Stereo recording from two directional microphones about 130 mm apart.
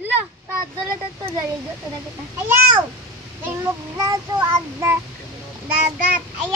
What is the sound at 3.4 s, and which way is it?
Child singing, 20° right (ahead or behind).